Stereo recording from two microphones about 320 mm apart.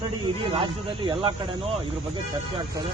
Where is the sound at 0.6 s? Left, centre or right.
Centre.